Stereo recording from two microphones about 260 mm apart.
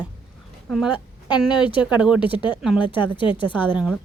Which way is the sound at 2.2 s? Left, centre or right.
Centre.